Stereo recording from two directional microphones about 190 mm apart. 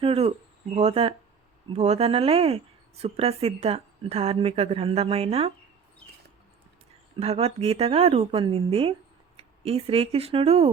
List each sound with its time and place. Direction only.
0.0 s a sound: 30° right (ahead or behind)
1.7 s speech: 35° right (ahead or behind)
7.2 s speech: 30° right (ahead or behind)